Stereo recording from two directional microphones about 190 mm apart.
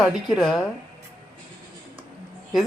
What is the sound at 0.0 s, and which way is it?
Speech, centre (ahead or behind).